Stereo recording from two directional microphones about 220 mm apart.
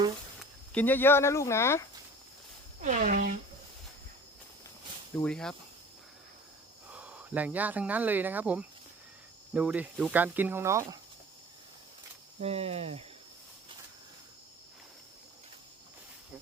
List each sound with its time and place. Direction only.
0.3 s speech: 5° left (ahead or behind)
2.8 s speech: 35° right (ahead or behind)
5.1 s speech: 5° left (ahead or behind)
6.9 s speech: 5° right (ahead or behind)
12.4 s speech: 30° right (ahead or behind)